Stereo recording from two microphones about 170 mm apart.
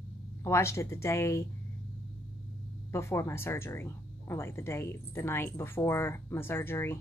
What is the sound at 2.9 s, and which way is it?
Speech, 15° left (ahead or behind).